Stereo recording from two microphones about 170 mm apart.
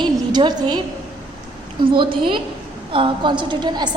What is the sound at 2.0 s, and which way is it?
A woman's voice, 30° right (ahead or behind).